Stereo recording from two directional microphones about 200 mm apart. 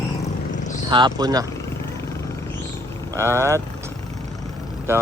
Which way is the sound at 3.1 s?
15° right (ahead or behind).